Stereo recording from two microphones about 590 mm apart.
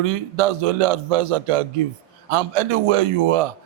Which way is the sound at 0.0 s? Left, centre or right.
Right.